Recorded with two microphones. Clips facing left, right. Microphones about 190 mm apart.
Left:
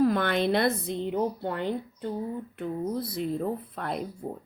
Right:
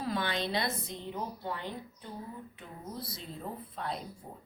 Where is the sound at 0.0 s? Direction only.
55° left (ahead or behind).